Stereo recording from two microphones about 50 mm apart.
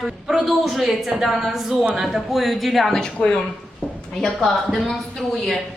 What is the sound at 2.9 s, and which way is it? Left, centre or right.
Speech, centre.